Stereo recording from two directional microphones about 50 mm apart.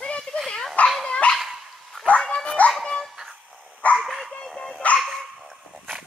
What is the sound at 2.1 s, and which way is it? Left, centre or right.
Dog, left.